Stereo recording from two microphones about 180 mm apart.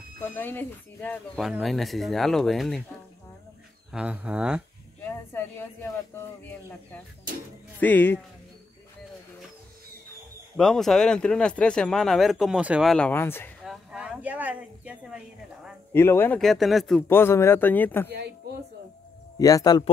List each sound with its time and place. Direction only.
0.2 s speech: 10° left (ahead or behind)
3.9 s speech: 5° right (ahead or behind)
5.0 s speech: 10° left (ahead or behind)
7.8 s speech: 10° left (ahead or behind)
10.5 s speech: 5° left (ahead or behind)
12.9 s speech: 10° left (ahead or behind)
13.7 s a sound: 5° right (ahead or behind)
15.9 s speech: 10° left (ahead or behind)
16.3 s speech: centre (ahead or behind)
17.1 s speech: 15° left (ahead or behind)
19.3 s speech: 20° left (ahead or behind)